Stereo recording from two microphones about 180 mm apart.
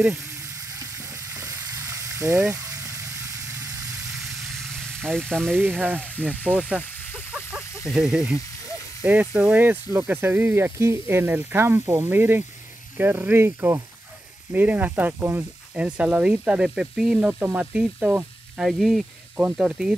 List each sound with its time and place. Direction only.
1.3 s frying: 20° right (ahead or behind)
2.6 s vehicle: 20° right (ahead or behind)
4.3 s vehicle: centre (ahead or behind)
5.6 s speech: 10° right (ahead or behind)
6.2 s speech: 10° left (ahead or behind)
7.9 s speech: 5° right (ahead or behind)